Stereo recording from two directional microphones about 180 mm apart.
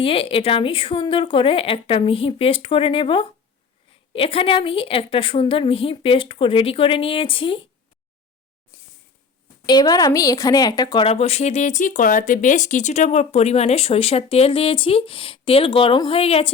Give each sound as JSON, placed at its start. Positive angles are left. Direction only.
{"t": 0.0, "sound": "speech", "side_deg": 30}
{"t": 9.6, "sound": "a woman's voice", "side_deg": 20}
{"t": 11.0, "sound": "speech", "side_deg": 35}